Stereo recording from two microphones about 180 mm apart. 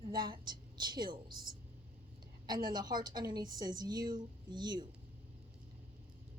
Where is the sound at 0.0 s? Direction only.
25° right (ahead or behind).